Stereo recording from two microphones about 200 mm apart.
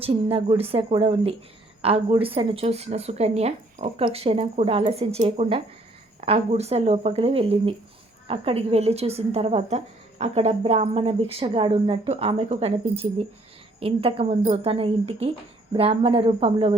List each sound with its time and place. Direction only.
0.0 s a woman's voice: 30° right (ahead or behind)